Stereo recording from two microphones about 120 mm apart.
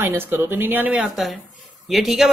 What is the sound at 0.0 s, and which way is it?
Speech, 20° right (ahead or behind).